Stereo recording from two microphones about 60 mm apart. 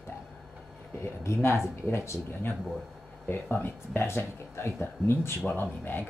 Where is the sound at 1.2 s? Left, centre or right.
Left.